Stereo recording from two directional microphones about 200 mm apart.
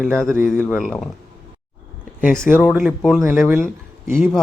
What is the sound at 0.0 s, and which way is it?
Speech, 5° left (ahead or behind).